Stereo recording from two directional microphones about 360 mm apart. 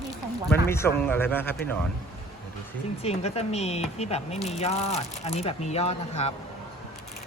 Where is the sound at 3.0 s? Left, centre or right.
Centre.